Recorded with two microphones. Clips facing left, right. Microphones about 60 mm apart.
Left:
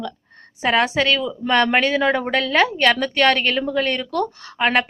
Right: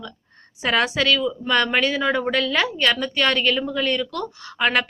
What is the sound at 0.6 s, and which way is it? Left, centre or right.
A woman's voice, left.